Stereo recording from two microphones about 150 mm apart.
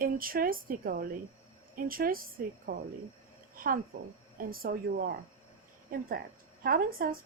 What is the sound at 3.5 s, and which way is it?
A woman's voice, 70° right (ahead or behind).